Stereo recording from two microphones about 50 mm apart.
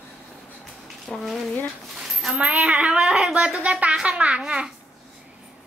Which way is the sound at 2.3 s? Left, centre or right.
Right.